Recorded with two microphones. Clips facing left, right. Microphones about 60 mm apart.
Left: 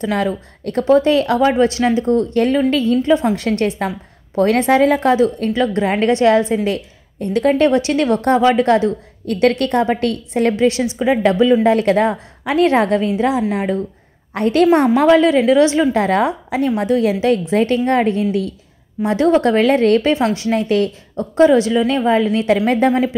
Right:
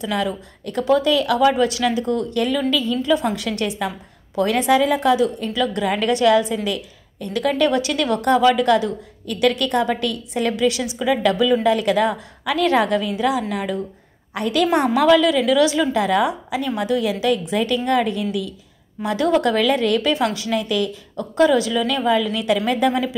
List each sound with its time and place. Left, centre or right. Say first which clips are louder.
0.0 s a woman's voice: left 4 dB; left